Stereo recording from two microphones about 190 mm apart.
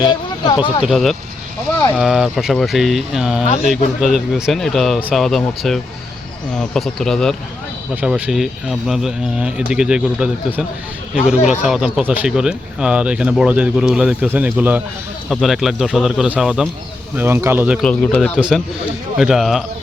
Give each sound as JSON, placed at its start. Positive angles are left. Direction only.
{"t": 0.0, "sound": "speech", "side_deg": 20}
{"t": 0.9, "sound": "speech", "side_deg": 0}
{"t": 17.7, "sound": "speech", "side_deg": 5}
{"t": 18.3, "sound": "speech", "side_deg": -5}